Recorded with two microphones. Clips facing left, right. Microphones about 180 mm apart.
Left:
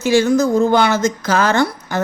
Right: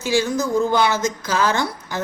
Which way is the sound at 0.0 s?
70° left (ahead or behind).